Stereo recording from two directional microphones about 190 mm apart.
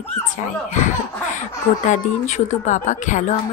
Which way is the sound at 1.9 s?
35° left (ahead or behind).